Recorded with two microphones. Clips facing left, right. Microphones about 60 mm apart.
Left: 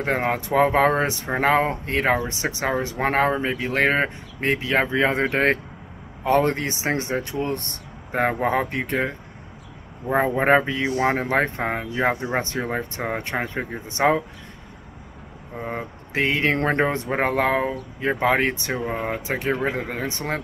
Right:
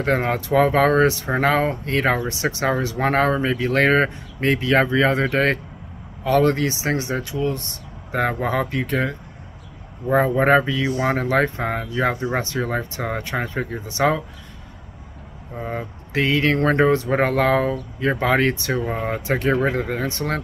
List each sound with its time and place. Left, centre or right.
0.0 s speech: centre
2.0 s speech: centre
2.8 s speech: left
3.1 s speech: centre
4.9 s speech: left
7.3 s speech: left
8.2 s speech: left
10.1 s speech: left
15.7 s speech: left
18.9 s speech: centre